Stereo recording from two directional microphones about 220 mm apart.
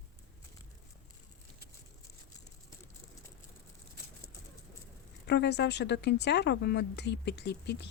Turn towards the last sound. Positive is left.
turn(degrees=50)  # may be behind; listen again after turning